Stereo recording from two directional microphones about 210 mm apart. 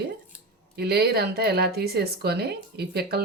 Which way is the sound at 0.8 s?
50° right (ahead or behind).